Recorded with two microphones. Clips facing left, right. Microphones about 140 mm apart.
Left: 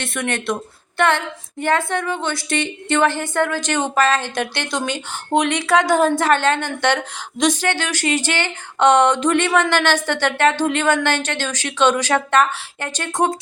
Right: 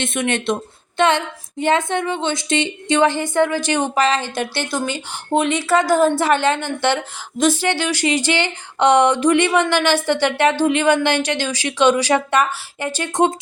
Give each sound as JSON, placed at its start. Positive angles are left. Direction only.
{"t": 0.0, "sound": "a woman's voice", "side_deg": -20}